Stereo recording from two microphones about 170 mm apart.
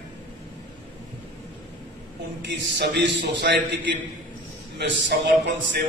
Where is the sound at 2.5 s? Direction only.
85° right.